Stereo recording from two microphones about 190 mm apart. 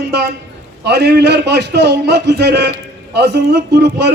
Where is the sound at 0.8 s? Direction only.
60° right (ahead or behind).